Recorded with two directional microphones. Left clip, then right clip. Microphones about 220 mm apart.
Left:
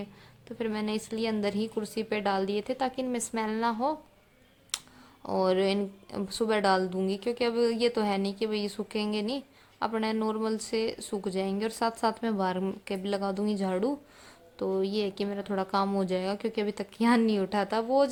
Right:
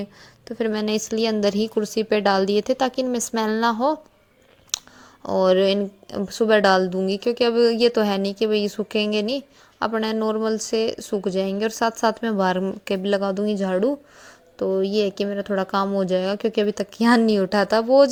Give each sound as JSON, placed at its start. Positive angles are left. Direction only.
{"t": 0.0, "sound": "a woman's voice", "side_deg": -20}
{"t": 4.7, "sound": "clicking", "side_deg": -20}
{"t": 5.2, "sound": "a woman's voice", "side_deg": -20}